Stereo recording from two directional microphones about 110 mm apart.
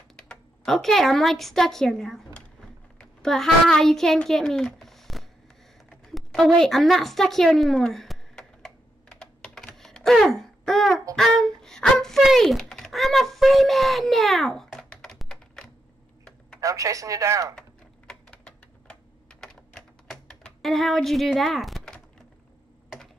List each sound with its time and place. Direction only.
0.1 s a child's voice: 5° left (ahead or behind)
5.9 s a sound: 5° left (ahead or behind)
11.1 s speech: 5° left (ahead or behind)
16.6 s speech: 30° right (ahead or behind)
17.6 s typing: 10° left (ahead or behind)
20.1 s computer keyboard: 5° left (ahead or behind)